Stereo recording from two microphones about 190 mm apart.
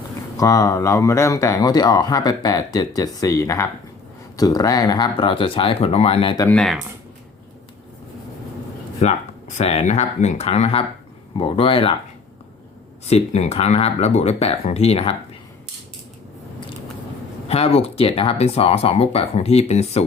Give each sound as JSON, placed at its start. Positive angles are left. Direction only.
{"t": 0.3, "sound": "speech", "side_deg": 15}
{"t": 6.5, "sound": "speech", "side_deg": 5}
{"t": 9.0, "sound": "speech", "side_deg": 35}
{"t": 13.1, "sound": "speech", "side_deg": 35}
{"t": 17.5, "sound": "speech", "side_deg": 35}